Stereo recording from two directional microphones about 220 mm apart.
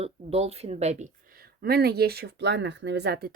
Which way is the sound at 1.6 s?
45° right (ahead or behind).